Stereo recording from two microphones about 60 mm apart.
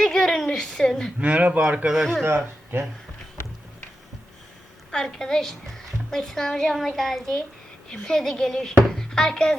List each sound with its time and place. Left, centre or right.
0.0 s a sound: centre
1.2 s a man's voice: right
2.2 s speech: right
4.9 s a woman's voice: centre